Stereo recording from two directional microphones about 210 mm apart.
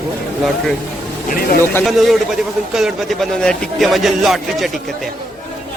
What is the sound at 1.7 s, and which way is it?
Speech, centre (ahead or behind).